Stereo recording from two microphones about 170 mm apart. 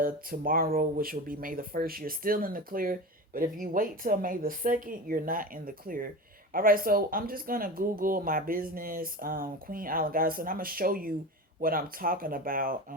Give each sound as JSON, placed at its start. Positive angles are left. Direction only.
{"t": 0.0, "sound": "speech", "side_deg": -55}